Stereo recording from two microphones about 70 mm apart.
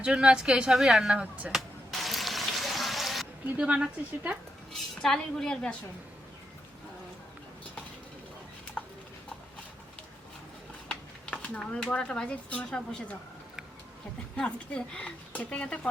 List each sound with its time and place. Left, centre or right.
0.0 s a woman's voice: centre
1.9 s frying: centre
3.4 s a woman's voice: centre
4.7 s speech: centre
8.8 s a sound: centre
10.8 s a sound: centre
11.6 s speech: centre
14.3 s speech: centre